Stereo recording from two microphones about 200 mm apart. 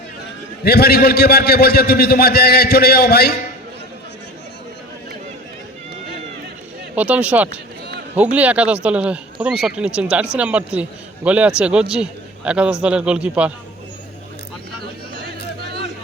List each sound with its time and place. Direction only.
0.6 s a man's voice: 50° left (ahead or behind)
6.9 s speech: 5° right (ahead or behind)